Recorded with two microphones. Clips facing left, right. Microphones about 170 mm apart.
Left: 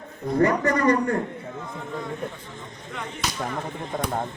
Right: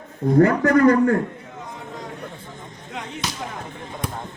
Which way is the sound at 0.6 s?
55° right (ahead or behind).